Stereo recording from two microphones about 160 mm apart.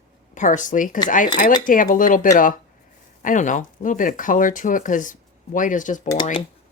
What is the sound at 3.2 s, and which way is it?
Speech, 55° left (ahead or behind).